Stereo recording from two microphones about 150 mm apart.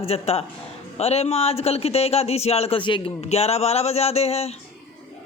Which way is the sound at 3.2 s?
45° left (ahead or behind).